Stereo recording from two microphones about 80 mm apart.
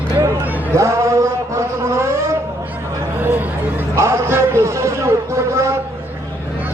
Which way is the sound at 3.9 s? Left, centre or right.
Right.